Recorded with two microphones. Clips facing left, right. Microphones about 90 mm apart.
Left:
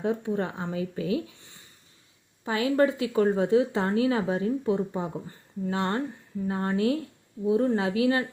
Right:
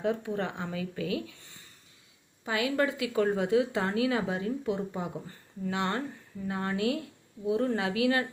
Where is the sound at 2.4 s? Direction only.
35° left (ahead or behind).